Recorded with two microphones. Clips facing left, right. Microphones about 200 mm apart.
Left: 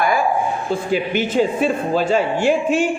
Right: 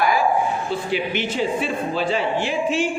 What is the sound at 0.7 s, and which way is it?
A man's voice, 45° left (ahead or behind).